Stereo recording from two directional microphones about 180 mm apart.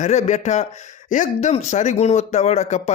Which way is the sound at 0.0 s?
40° left (ahead or behind).